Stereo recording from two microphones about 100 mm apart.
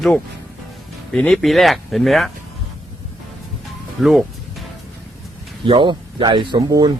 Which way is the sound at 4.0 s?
Centre (ahead or behind).